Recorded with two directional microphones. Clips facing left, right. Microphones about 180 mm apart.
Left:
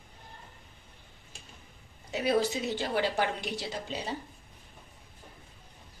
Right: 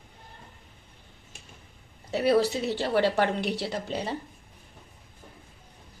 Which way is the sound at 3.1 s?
65° right (ahead or behind).